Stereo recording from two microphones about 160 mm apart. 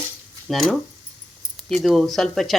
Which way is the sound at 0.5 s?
Centre (ahead or behind).